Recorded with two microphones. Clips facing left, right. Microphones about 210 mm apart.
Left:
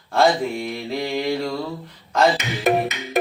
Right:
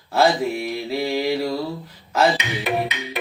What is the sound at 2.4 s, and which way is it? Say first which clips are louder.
Music: left 4 dB; 45° left (ahead or behind).